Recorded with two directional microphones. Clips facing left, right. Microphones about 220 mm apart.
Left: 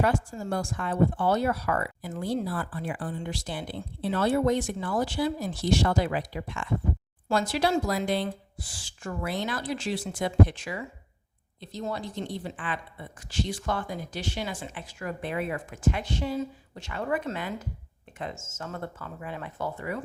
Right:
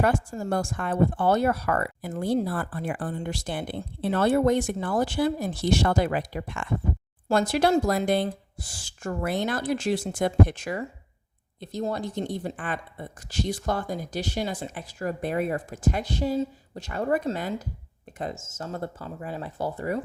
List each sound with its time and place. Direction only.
0.0 s speech: 50° right (ahead or behind)